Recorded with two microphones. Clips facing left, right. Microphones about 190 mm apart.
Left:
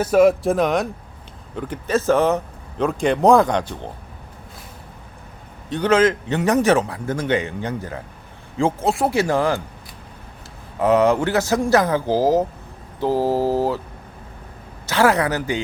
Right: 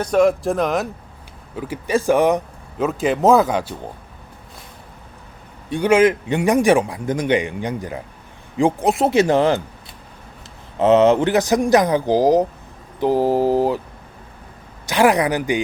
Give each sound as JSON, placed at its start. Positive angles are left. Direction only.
{"t": 0.0, "sound": "a man's voice", "side_deg": 5}
{"t": 5.6, "sound": "a man's voice", "side_deg": -10}
{"t": 10.8, "sound": "a man's voice", "side_deg": -25}
{"t": 14.8, "sound": "a man's voice", "side_deg": -15}